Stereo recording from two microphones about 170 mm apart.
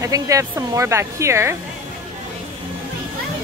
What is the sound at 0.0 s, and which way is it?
Speech, 20° right (ahead or behind).